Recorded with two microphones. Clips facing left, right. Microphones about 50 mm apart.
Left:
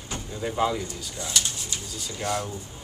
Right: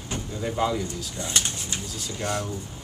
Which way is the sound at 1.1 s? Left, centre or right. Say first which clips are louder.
Even; right.